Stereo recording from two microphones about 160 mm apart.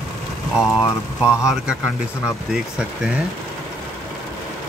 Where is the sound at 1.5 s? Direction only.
5° right (ahead or behind).